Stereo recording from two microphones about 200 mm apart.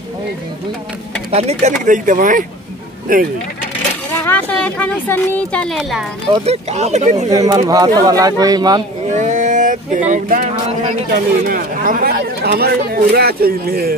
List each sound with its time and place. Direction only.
1.3 s speech: 30° right (ahead or behind)
4.2 s speech: 10° left (ahead or behind)
6.3 s speech: 30° right (ahead or behind)
7.3 s speech: 20° right (ahead or behind)
9.1 s speech: 35° right (ahead or behind)